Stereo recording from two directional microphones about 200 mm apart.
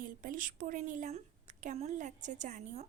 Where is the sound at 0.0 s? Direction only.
45° right (ahead or behind).